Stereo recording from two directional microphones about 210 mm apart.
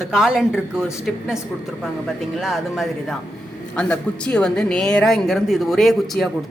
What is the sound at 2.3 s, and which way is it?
Speech, centre (ahead or behind).